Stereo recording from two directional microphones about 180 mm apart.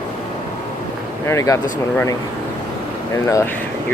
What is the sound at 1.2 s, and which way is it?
Speech, 15° left (ahead or behind).